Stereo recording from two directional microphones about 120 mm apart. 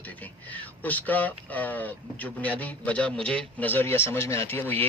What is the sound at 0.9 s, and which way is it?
Speech, 15° left (ahead or behind).